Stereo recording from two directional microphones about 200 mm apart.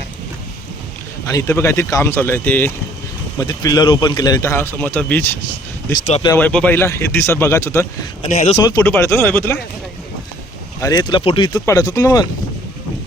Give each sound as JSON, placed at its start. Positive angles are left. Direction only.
{"t": 1.3, "sound": "a man's voice", "side_deg": 15}
{"t": 6.2, "sound": "a man's voice", "side_deg": 10}
{"t": 10.8, "sound": "a man's voice", "side_deg": 20}